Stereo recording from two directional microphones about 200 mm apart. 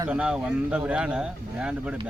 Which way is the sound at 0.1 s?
5° right (ahead or behind).